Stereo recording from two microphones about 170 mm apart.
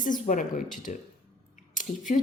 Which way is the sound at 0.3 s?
50° left (ahead or behind).